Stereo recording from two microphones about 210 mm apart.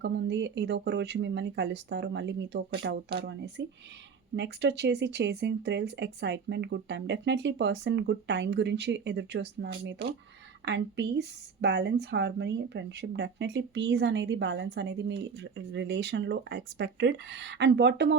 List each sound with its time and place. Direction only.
0.0 s speech: 55° right (ahead or behind)